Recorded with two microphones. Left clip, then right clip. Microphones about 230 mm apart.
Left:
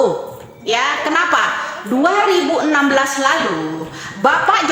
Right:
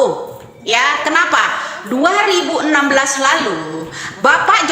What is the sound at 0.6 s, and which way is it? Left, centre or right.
Speech, centre.